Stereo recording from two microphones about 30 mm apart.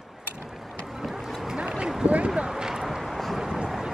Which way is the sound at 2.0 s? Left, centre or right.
Right.